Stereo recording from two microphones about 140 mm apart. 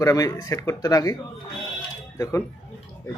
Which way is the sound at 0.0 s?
25° left (ahead or behind).